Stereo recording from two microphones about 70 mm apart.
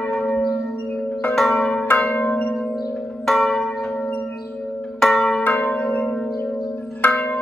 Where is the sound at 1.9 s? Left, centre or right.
Left.